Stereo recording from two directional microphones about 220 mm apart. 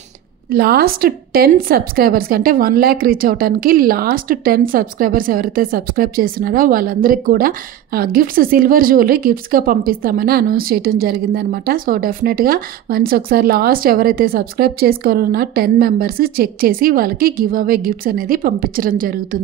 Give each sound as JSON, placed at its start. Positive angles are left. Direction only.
{"t": 0.5, "sound": "a woman's voice", "side_deg": -45}